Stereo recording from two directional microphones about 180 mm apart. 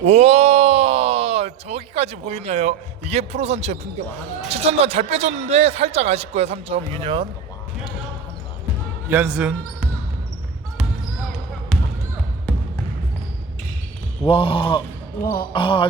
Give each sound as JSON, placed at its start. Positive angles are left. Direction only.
{"t": 0.0, "sound": "groan", "side_deg": -35}
{"t": 4.4, "sound": "a man's voice", "side_deg": -35}
{"t": 9.0, "sound": "speech", "side_deg": -5}
{"t": 14.3, "sound": "a sound", "side_deg": 30}
{"t": 15.2, "sound": "speech", "side_deg": 50}
{"t": 15.5, "sound": "a sound", "side_deg": 30}